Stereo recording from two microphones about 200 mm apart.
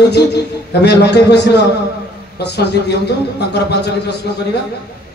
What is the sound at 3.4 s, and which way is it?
Speech, 55° left (ahead or behind).